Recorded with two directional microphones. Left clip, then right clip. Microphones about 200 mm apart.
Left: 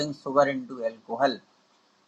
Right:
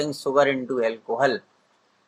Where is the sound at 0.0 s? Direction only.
35° right (ahead or behind).